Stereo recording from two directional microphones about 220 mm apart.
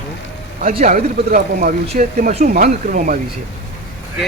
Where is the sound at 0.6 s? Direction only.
35° right (ahead or behind).